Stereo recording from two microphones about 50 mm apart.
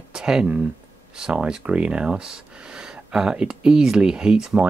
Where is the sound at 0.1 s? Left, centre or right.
Centre.